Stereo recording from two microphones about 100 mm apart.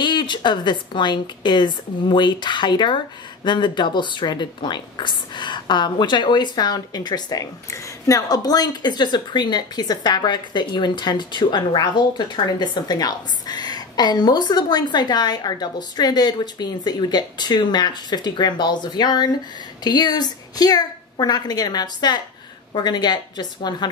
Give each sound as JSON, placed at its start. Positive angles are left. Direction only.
{"t": 0.0, "sound": "speech", "side_deg": 50}